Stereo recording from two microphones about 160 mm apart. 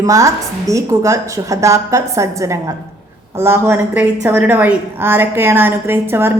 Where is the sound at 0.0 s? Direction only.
20° right (ahead or behind).